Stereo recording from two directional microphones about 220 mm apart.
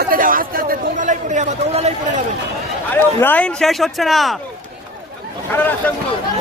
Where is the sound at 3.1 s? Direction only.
10° left (ahead or behind).